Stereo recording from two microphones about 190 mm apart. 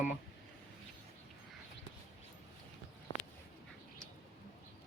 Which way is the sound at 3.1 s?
25° left (ahead or behind).